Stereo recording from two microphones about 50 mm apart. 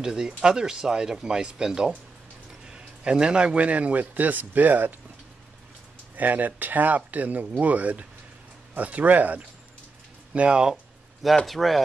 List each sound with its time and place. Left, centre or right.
0.0 s a man's voice: centre; by 4.9 s right
6.1 s speech: right
10.3 s a man's voice: right
11.4 s speech: centre